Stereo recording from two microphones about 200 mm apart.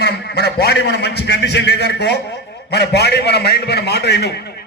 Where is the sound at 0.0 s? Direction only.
55° left (ahead or behind).